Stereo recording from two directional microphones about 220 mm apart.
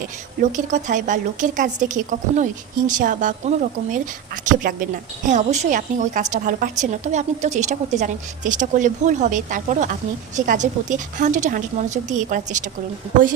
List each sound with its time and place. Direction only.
0.5 s a woman's voice: 35° right (ahead or behind)
4.4 s a woman's voice: 35° right (ahead or behind)